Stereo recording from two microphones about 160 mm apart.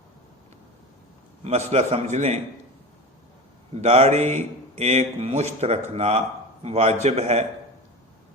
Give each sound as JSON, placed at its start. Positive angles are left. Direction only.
{"t": 1.5, "sound": "a man's voice", "side_deg": -45}
{"t": 3.8, "sound": "a man's voice", "side_deg": -45}